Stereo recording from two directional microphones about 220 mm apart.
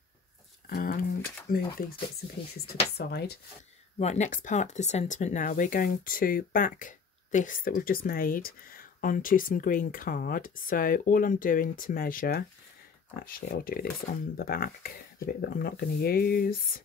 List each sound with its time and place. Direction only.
0.7 s a sound: 40° left (ahead or behind)
2.6 s speech: 45° left (ahead or behind)
4.0 s speech: 30° left (ahead or behind)